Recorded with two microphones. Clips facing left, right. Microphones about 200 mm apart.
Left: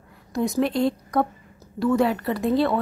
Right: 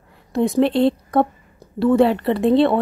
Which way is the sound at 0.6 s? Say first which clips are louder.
Right 6 dB; 30° right (ahead or behind).